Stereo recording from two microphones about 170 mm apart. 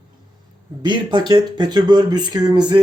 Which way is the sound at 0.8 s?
25° right (ahead or behind).